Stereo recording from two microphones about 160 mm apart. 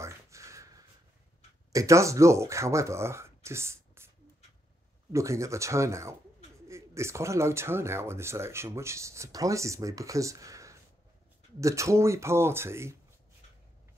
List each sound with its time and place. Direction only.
0.0 s a sound: 20° right (ahead or behind)
1.7 s speech: 20° right (ahead or behind)
5.1 s speech: 20° right (ahead or behind)